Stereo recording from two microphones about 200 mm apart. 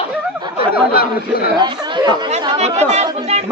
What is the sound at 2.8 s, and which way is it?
Speech, 35° right (ahead or behind).